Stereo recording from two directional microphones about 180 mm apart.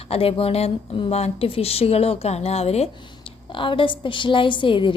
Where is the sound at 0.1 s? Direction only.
30° left (ahead or behind).